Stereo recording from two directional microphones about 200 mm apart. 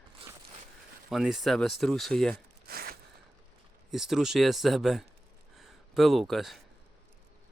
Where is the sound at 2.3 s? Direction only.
50° right (ahead or behind).